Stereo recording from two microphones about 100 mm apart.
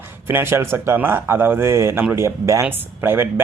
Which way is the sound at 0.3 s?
20° right (ahead or behind).